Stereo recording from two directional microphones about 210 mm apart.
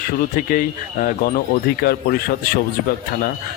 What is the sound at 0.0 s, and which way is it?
Speech, 40° left (ahead or behind).